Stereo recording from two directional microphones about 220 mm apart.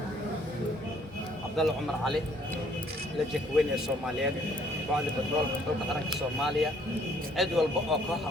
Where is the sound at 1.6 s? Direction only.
Centre (ahead or behind).